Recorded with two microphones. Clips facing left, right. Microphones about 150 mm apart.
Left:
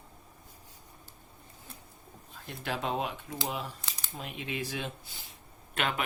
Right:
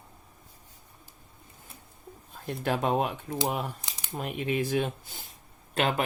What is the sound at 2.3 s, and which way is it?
Speech, 45° right (ahead or behind).